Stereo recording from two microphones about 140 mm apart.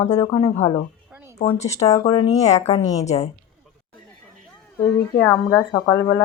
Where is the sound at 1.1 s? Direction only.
15° right (ahead or behind).